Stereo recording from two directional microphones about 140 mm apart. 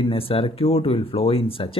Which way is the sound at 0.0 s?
40° left (ahead or behind).